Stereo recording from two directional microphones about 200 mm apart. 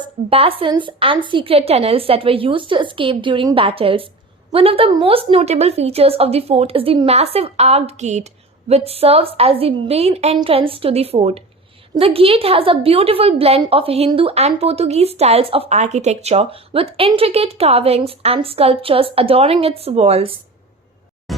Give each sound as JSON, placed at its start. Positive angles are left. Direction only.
{"t": 0.0, "sound": "a woman's voice", "side_deg": -30}
{"t": 21.3, "sound": "music", "side_deg": 0}